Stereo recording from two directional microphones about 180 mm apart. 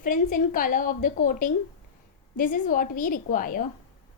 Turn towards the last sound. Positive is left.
turn(degrees=50)  # may be behind; listen again after turning